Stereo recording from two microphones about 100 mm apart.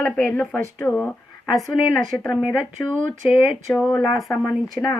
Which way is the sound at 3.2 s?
55° left (ahead or behind).